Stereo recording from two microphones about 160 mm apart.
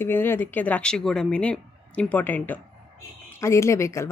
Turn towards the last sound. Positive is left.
turn(degrees=20)  # may be behind; listen again after turning